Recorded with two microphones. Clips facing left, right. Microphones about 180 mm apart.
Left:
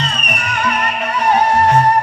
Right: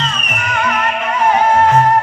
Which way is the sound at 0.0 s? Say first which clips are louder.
Even; 35° left (ahead or behind).